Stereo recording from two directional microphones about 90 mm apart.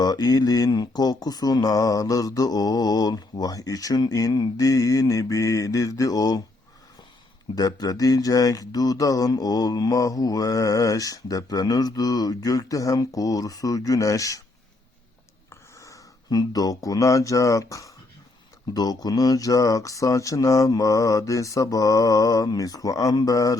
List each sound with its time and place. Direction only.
0.0 s speech: 45° left (ahead or behind)
7.5 s speech: 45° left (ahead or behind)
15.4 s speech: 35° left (ahead or behind)